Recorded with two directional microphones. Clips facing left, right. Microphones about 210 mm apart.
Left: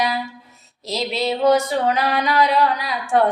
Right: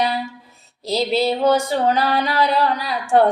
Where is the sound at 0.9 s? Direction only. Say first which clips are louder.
Right 4 dB; 30° right (ahead or behind).